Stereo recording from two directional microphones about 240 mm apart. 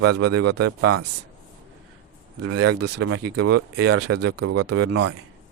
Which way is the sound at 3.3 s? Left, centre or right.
Right.